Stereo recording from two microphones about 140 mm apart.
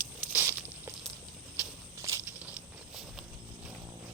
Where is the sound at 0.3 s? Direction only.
15° right (ahead or behind).